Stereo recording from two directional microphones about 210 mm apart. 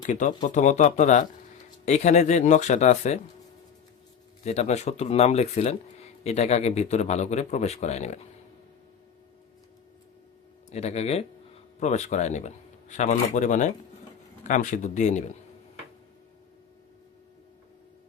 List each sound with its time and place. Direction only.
0.0 s speech: 35° left (ahead or behind)
4.4 s speech: 30° left (ahead or behind)
10.7 s speech: 30° left (ahead or behind)